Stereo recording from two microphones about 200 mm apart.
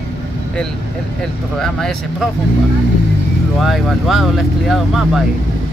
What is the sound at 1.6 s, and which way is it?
Speech, centre (ahead or behind).